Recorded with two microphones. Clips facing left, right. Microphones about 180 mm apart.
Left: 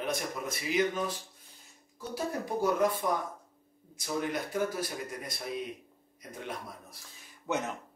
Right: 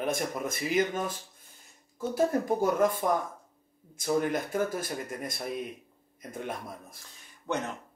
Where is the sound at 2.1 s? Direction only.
50° right (ahead or behind).